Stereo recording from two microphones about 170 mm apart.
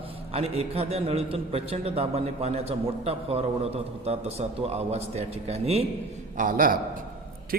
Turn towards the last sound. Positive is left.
turn(degrees=-55)  # may be behind; listen again after turning